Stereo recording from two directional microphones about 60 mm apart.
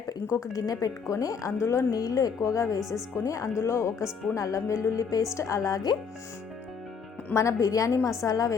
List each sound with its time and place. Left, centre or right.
0.1 s speech: left
1.5 s a woman's voice: left
1.9 s a woman's voice: left
3.6 s a woman's voice: left
4.4 s a woman's voice: left
7.3 s a woman's voice: left